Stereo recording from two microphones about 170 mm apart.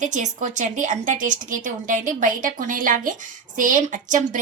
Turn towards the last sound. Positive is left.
turn(degrees=-50)  # may be behind; listen again after turning